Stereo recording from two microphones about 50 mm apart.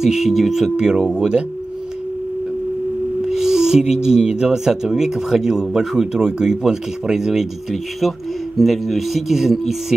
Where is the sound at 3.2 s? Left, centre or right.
Centre.